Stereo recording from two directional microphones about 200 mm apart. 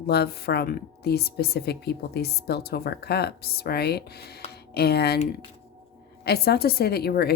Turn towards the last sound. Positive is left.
turn(degrees=50)  # may be behind; listen again after turning